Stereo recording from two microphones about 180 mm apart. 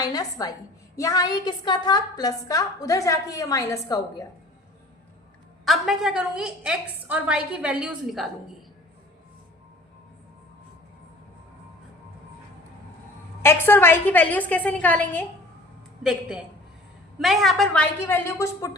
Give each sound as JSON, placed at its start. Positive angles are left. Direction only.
{"t": 0.0, "sound": "a woman's voice", "side_deg": 20}
{"t": 5.6, "sound": "a woman's voice", "side_deg": 0}
{"t": 13.4, "sound": "a woman's voice", "side_deg": 15}
{"t": 17.2, "sound": "a woman's voice", "side_deg": 0}
{"t": 18.1, "sound": "a woman's voice", "side_deg": 15}